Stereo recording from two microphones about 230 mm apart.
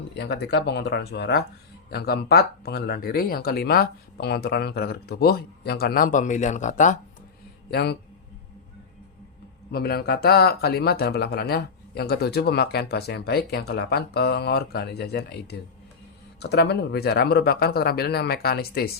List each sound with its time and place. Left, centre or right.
0.1 s speech: left
7.7 s speech: left
9.7 s speech: left